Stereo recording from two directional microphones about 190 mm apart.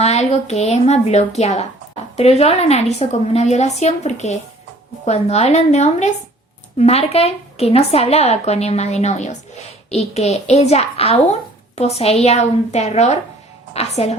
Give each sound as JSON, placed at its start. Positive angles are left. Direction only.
{"t": 0.0, "sound": "a woman's voice", "side_deg": 35}